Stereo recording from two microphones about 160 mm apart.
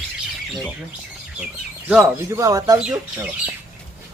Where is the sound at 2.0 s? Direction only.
20° right (ahead or behind).